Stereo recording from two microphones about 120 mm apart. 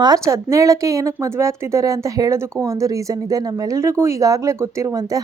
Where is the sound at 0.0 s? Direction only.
30° right (ahead or behind).